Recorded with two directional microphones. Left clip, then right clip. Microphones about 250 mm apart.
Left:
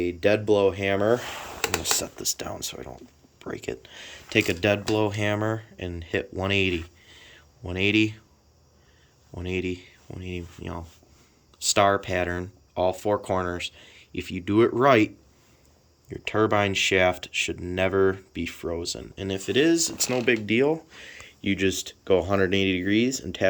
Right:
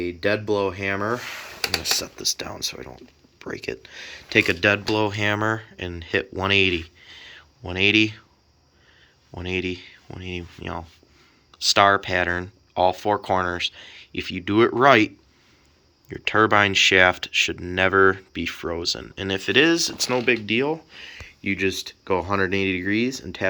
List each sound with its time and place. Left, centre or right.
0.2 s speech: centre
7.0 s a sound: centre
9.3 s speech: centre